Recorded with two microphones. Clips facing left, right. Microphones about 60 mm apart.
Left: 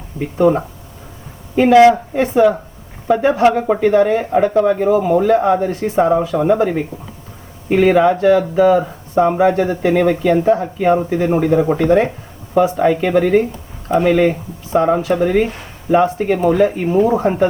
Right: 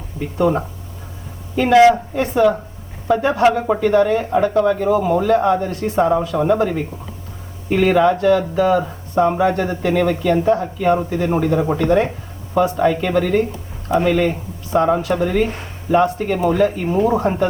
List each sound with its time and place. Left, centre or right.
0.3 s speech: centre
6.3 s speech: centre
6.6 s speech: left
8.7 s speech: centre